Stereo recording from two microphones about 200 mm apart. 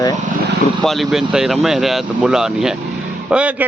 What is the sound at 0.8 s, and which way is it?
Speech, centre (ahead or behind).